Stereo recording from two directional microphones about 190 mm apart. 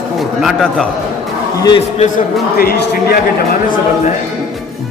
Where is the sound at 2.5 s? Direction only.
55° left (ahead or behind).